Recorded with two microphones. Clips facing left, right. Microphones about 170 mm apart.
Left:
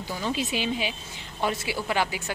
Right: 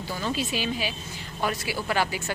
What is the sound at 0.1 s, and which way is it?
A woman's voice, 15° left (ahead or behind).